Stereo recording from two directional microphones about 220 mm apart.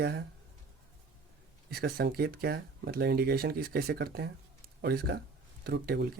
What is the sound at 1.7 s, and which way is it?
Speech, 45° right (ahead or behind).